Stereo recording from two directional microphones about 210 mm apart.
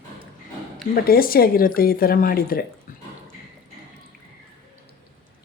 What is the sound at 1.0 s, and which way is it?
Speech, 45° left (ahead or behind).